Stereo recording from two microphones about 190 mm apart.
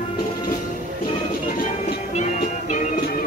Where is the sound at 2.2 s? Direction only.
40° left (ahead or behind).